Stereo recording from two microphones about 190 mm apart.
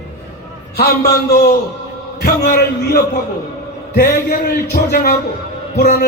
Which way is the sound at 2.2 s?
55° left (ahead or behind).